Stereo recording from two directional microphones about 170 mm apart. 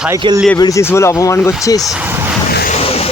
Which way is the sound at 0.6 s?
20° left (ahead or behind).